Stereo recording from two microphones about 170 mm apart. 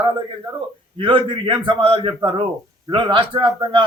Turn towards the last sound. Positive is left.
turn(degrees=-30)  # may be behind; listen again after turning